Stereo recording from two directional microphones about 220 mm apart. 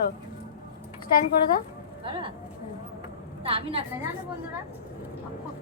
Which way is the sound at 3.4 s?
25° right (ahead or behind).